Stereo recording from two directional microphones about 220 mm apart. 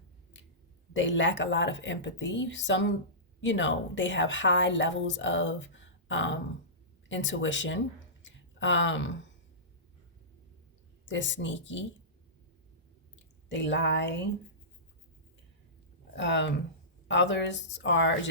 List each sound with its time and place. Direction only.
0.9 s a woman's voice: 55° left (ahead or behind)
11.0 s a woman's voice: 55° left (ahead or behind)
13.5 s speech: 55° left (ahead or behind)
16.1 s a woman's voice: 55° left (ahead or behind)